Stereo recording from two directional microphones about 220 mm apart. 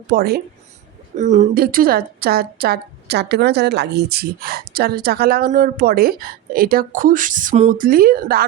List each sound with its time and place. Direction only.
0.1 s a woman's voice: 45° right (ahead or behind)
1.1 s a woman's voice: 35° right (ahead or behind)